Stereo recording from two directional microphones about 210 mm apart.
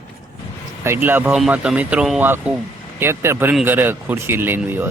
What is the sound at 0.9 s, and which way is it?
Speech, 10° right (ahead or behind).